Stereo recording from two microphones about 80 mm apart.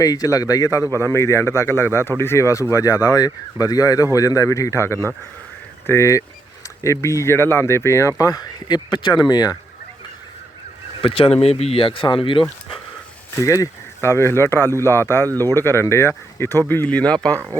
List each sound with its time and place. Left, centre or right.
0.0 s speech: left
1.0 s speech: left
11.8 s speech: left
13.3 s speech: left; by 17.4 s centre